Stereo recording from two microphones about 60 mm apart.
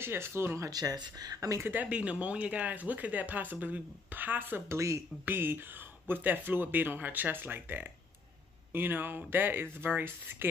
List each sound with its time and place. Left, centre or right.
0.0 s speech: right
0.7 s speech: right
1.7 s speech: right
4.6 s speech: right
5.2 s speech: right